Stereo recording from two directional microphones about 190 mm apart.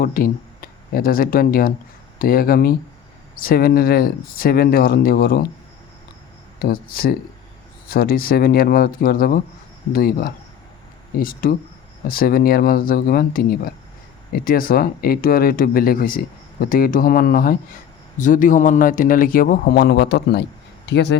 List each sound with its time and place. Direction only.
0.0 s speech: 50° left (ahead or behind)
6.6 s speech: 50° left (ahead or behind)